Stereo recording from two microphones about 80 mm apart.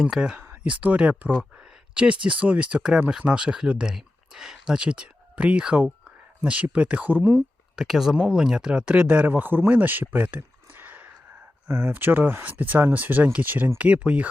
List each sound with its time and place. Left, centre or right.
0.0 s speech: centre
0.3 s speech: right
7.8 s speech: centre